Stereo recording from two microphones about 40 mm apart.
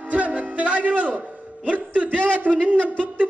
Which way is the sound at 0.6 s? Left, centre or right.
Right.